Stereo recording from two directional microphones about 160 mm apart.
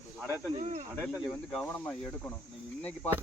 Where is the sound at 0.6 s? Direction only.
50° right (ahead or behind).